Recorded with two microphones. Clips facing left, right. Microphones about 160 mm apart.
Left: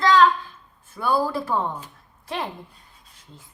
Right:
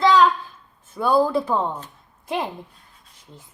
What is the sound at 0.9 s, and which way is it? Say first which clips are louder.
Speech: right 4 dB; 20° right (ahead or behind).